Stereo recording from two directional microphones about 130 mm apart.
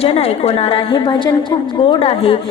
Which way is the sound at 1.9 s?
45° left (ahead or behind).